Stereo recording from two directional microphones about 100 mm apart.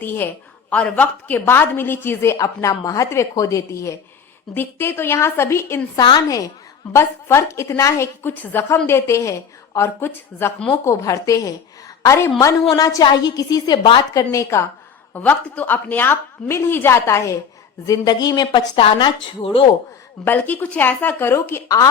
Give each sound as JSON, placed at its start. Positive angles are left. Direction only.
{"t": 0.0, "sound": "a woman's voice", "side_deg": 20}
{"t": 6.0, "sound": "speech", "side_deg": 45}
{"t": 6.9, "sound": "a woman's voice", "side_deg": 30}
{"t": 12.7, "sound": "a woman's voice", "side_deg": 40}
{"t": 15.1, "sound": "a woman's voice", "side_deg": 15}
{"t": 17.8, "sound": "speech", "side_deg": 45}
{"t": 19.4, "sound": "speech", "side_deg": 65}
{"t": 20.2, "sound": "a woman's voice", "side_deg": 20}